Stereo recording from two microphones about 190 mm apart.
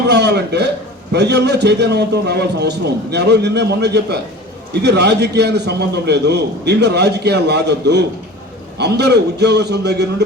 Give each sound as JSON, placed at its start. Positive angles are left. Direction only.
{"t": 0.1, "sound": "a man's voice", "side_deg": -65}